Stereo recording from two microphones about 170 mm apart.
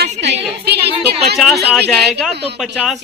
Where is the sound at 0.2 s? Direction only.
90° right.